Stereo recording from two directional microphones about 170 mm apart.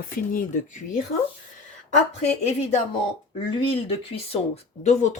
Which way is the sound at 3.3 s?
35° left (ahead or behind).